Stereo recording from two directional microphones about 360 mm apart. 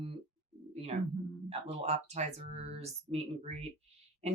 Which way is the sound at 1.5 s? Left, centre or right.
Centre.